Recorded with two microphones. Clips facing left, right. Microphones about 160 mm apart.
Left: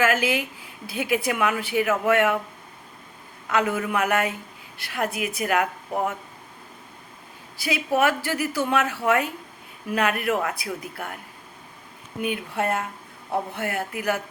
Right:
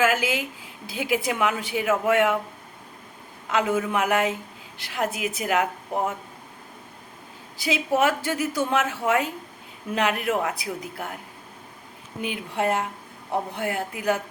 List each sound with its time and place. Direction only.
0.0 s speech: 15° right (ahead or behind)
3.5 s a woman's voice: 20° right (ahead or behind)
7.6 s a woman's voice: 20° right (ahead or behind)
12.5 s speech: 20° right (ahead or behind)